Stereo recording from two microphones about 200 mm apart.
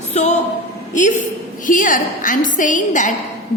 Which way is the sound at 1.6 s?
40° left (ahead or behind).